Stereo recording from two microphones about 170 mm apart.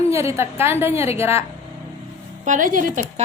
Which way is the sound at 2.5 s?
50° right (ahead or behind).